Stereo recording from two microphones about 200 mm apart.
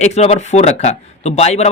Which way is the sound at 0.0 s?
35° left (ahead or behind).